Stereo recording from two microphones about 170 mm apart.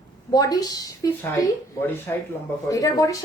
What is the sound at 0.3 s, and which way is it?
A woman's voice, 20° left (ahead or behind).